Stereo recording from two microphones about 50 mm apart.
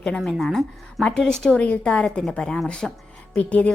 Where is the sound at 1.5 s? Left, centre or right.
Left.